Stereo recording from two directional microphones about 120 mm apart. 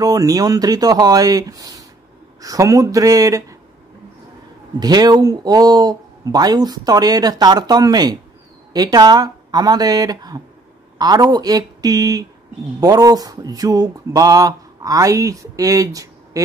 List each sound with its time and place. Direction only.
0.0 s speech: 30° right (ahead or behind)
4.7 s speech: 35° right (ahead or behind)